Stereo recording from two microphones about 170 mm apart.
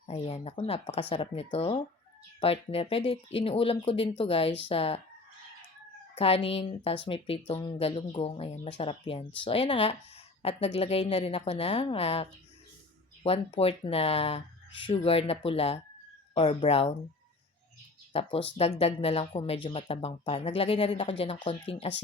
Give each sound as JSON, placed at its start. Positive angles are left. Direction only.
{"t": 0.1, "sound": "a woman's voice", "side_deg": 35}
{"t": 6.1, "sound": "a woman's voice", "side_deg": 35}
{"t": 18.1, "sound": "a woman's voice", "side_deg": 35}